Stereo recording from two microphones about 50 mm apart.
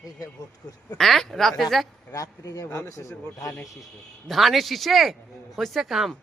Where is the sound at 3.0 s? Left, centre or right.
Left.